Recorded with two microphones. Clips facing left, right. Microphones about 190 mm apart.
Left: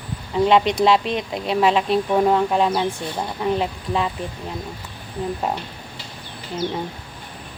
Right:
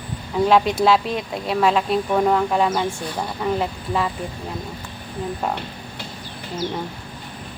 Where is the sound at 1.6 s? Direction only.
Centre (ahead or behind).